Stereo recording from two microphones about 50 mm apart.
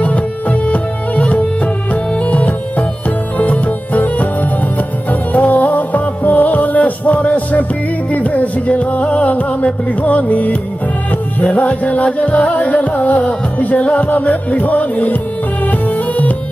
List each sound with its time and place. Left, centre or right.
0.0 s music: left
5.3 s music: left